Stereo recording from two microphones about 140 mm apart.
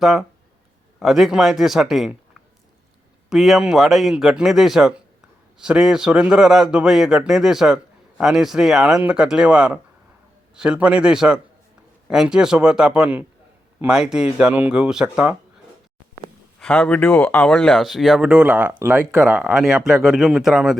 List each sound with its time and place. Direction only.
0.0 s speech: centre (ahead or behind)
3.2 s speech: centre (ahead or behind)
16.6 s speech: 5° left (ahead or behind)